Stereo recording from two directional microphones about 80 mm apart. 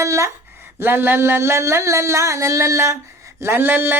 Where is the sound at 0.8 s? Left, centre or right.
Right.